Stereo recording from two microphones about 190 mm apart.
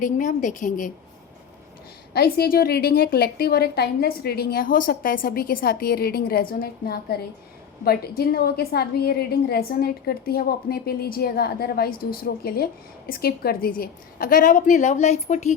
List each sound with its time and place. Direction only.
0.0 s a woman's voice: 45° left (ahead or behind)
2.1 s a woman's voice: 55° left (ahead or behind); by 15.5 s 40° left (ahead or behind)